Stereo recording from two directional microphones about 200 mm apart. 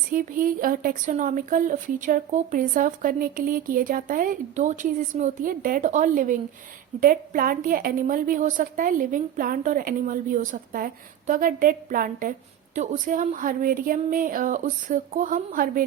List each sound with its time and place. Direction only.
0.1 s a woman's voice: 45° right (ahead or behind)